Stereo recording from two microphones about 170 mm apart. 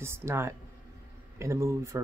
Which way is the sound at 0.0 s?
15° right (ahead or behind).